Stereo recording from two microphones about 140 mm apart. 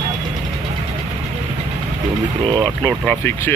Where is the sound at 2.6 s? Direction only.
15° left (ahead or behind).